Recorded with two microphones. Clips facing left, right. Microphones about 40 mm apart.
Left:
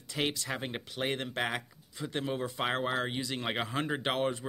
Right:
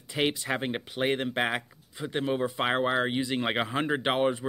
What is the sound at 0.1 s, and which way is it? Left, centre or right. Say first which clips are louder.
Speech: right 5 dB; right.